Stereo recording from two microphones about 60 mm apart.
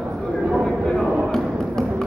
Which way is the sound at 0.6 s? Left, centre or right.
Centre.